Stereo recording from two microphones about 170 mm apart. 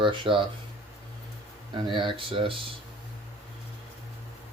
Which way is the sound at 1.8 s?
30° right (ahead or behind).